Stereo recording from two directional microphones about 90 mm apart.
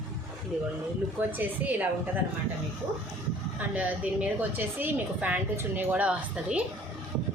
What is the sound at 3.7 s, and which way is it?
A woman's voice, 15° right (ahead or behind).